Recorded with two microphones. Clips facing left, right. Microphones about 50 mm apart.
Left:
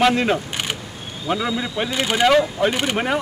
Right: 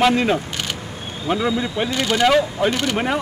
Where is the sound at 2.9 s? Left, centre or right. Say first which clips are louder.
Even; centre.